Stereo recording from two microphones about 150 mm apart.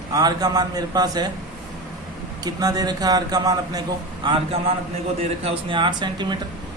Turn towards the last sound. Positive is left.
turn(degrees=-30)  # may be behind; listen again after turning